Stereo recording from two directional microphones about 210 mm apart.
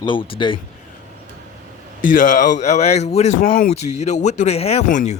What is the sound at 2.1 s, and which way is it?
Speech, 35° left (ahead or behind).